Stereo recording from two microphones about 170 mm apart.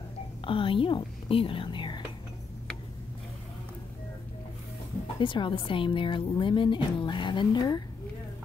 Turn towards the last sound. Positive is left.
turn(degrees=25)  # may be behind; listen again after turning